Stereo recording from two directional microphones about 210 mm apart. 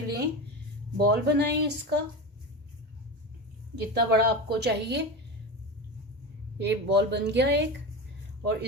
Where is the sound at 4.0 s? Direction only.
50° right (ahead or behind).